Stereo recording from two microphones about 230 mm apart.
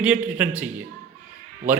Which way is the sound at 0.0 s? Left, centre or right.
Centre.